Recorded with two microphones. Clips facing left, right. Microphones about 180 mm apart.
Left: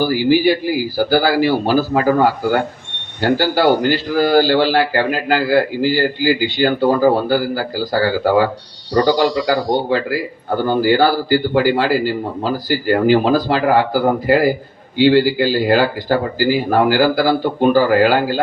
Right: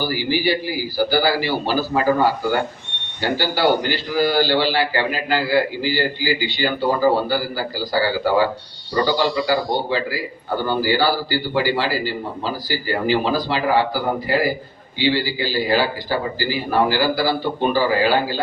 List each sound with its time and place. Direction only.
0.0 s a man's voice: 50° left (ahead or behind)
3.2 s a man's voice: 50° left (ahead or behind)
9.0 s speech: 35° left (ahead or behind)
10.6 s a man's voice: 50° left (ahead or behind)